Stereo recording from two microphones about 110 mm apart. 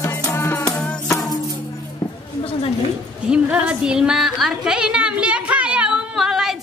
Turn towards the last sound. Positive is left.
turn(degrees=-5)  # may be behind; listen again after turning